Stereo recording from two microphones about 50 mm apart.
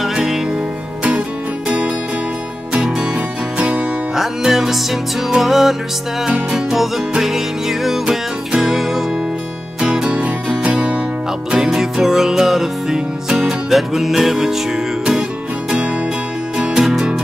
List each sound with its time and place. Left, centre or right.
0.1 s music: centre
2.7 s music: centre
4.1 s music: centre
9.8 s music: centre
11.5 s music: centre
16.5 s music: centre